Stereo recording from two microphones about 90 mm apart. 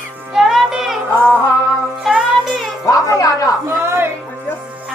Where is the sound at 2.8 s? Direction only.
40° left (ahead or behind).